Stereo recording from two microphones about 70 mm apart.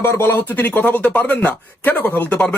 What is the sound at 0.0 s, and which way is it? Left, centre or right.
Speech, left.